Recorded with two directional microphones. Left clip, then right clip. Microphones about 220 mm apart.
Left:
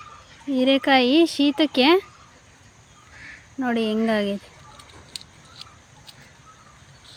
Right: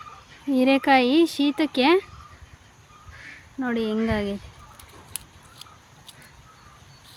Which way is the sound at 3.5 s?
5° left (ahead or behind).